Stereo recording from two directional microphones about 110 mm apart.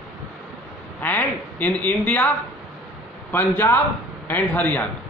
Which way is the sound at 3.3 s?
15° left (ahead or behind).